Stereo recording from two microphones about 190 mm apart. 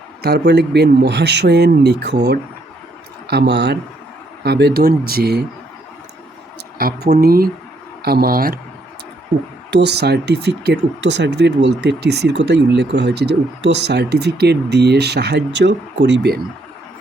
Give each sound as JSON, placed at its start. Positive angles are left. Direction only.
{"t": 0.2, "sound": "speech", "side_deg": -60}
{"t": 6.7, "sound": "speech", "side_deg": -50}
{"t": 9.6, "sound": "speech", "side_deg": -60}